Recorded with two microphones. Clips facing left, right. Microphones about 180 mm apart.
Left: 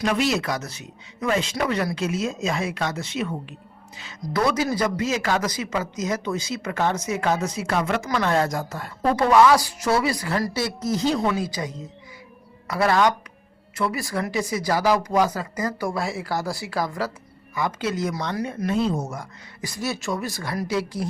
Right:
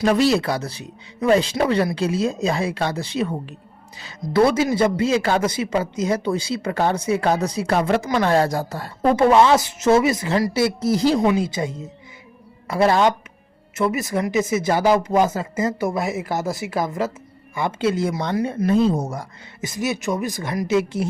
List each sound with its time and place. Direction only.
0.0 s a man's voice: 35° right (ahead or behind)
19.6 s speech: 20° right (ahead or behind)